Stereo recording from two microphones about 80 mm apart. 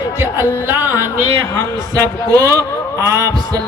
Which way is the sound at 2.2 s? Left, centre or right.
Right.